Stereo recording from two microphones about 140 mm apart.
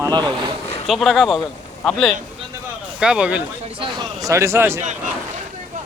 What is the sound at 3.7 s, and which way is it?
Speech, 35° right (ahead or behind).